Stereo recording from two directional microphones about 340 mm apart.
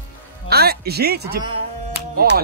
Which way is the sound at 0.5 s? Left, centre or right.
Right.